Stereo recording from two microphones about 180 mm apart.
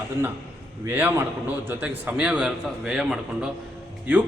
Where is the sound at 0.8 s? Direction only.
10° right (ahead or behind).